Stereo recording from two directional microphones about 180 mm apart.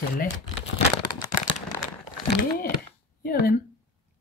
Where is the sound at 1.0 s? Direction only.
25° left (ahead or behind).